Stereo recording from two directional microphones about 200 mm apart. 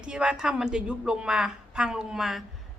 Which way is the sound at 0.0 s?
5° right (ahead or behind).